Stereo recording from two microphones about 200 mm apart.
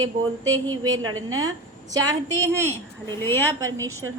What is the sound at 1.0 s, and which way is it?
Speech, 90° right.